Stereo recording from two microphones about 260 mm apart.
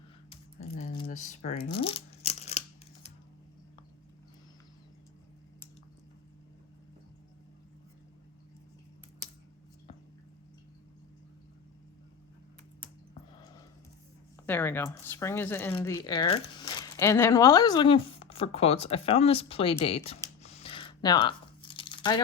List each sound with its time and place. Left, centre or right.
0.3 s a sound: left
14.4 s speech: centre
20.4 s crumpling: left